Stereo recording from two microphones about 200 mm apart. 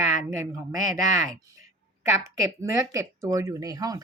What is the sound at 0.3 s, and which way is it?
Speech, 15° right (ahead or behind).